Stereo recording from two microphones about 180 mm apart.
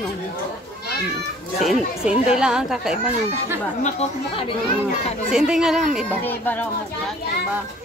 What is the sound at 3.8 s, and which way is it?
Speech, 40° left (ahead or behind).